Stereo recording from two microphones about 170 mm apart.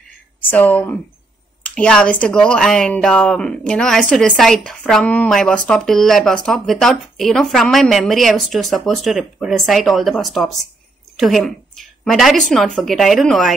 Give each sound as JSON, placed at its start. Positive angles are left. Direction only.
{"t": 0.4, "sound": "a woman's voice", "side_deg": 10}